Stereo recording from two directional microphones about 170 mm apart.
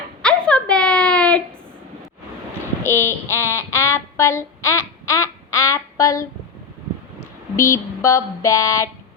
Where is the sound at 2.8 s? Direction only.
15° left (ahead or behind).